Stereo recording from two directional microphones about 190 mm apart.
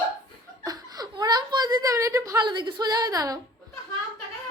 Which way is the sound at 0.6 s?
20° right (ahead or behind).